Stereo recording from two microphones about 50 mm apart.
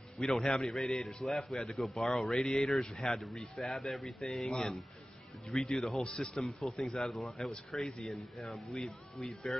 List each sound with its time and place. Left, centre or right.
0.2 s a man's voice: centre
6.0 s speech: centre
6.3 s a man's voice: centre